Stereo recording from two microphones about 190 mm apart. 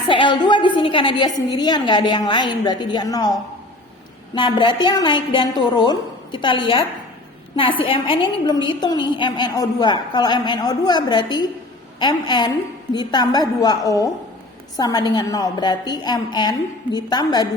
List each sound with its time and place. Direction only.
0.1 s a woman's voice: 25° left (ahead or behind)
4.4 s a woman's voice: 25° left (ahead or behind)